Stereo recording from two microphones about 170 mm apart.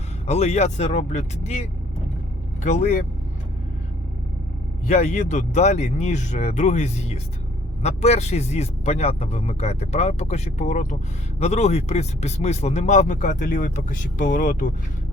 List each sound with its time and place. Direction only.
0.3 s speech: 40° left (ahead or behind)
2.6 s speech: 45° left (ahead or behind)
4.9 s speech: 40° left (ahead or behind)